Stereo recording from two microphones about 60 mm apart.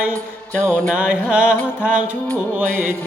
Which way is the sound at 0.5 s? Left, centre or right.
Centre.